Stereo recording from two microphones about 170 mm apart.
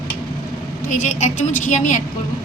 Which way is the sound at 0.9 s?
45° left (ahead or behind).